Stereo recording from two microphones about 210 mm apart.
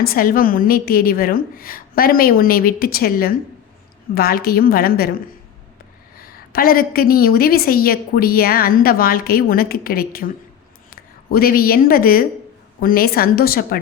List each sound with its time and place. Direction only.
0.0 s a woman's voice: 45° left (ahead or behind)
6.1 s a woman's voice: 45° left (ahead or behind)